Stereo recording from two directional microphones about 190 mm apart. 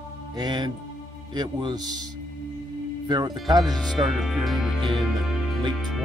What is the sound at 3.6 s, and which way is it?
Speech, centre (ahead or behind).